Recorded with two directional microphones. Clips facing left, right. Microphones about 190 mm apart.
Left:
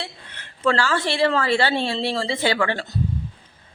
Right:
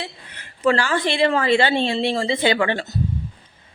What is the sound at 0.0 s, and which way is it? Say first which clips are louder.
A woman's voice: right 2 dB; 10° right (ahead or behind).